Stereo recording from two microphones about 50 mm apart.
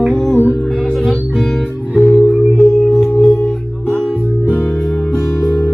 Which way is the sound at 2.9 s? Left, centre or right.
Centre.